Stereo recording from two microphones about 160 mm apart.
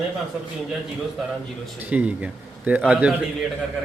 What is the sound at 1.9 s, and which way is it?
A man's voice, 10° right (ahead or behind).